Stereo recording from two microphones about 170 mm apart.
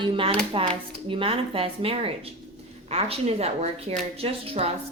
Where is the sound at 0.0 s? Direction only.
30° right (ahead or behind).